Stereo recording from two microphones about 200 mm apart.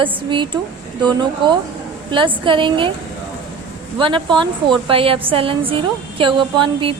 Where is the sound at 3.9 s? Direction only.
25° right (ahead or behind).